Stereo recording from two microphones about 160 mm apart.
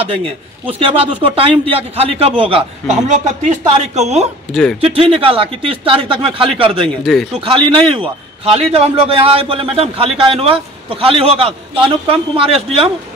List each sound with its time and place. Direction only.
0.7 s a man's voice: 35° right (ahead or behind)
4.5 s speech: 5° left (ahead or behind)
4.7 s a man's voice: 35° right (ahead or behind)